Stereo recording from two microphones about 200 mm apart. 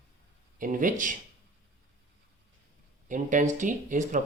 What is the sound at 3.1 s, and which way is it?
Speech, 40° right (ahead or behind).